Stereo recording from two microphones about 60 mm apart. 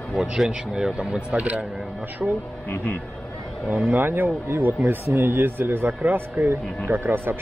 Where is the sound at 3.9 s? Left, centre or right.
Right.